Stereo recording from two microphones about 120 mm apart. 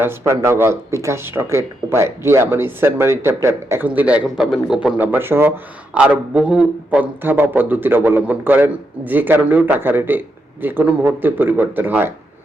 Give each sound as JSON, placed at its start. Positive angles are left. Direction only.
{"t": 0.0, "sound": "speech", "side_deg": -20}